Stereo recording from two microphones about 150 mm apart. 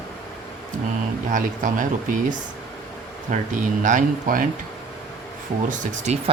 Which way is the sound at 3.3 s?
55° right (ahead or behind).